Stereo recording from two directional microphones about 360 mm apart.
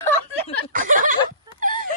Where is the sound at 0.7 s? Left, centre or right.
Right.